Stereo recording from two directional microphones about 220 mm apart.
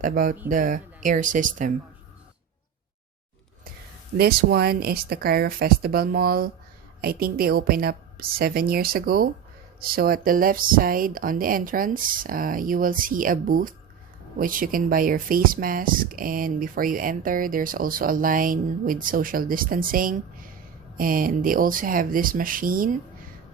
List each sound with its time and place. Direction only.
0.0 s speech: 35° right (ahead or behind)
4.2 s a woman's voice: 45° right (ahead or behind)